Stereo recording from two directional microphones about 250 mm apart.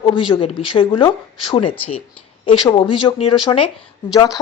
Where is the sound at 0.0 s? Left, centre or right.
Centre.